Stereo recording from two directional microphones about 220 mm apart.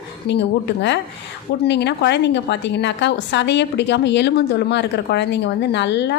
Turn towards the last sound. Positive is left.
turn(degrees=50)  # may be behind; listen again after turning